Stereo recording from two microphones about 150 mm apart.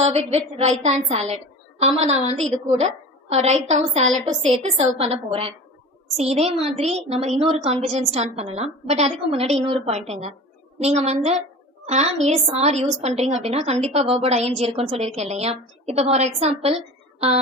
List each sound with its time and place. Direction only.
0.0 s a woman's voice: 45° right (ahead or behind)